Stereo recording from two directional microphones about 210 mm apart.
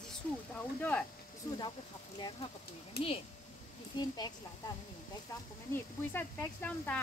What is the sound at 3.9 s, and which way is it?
Speech, 20° left (ahead or behind).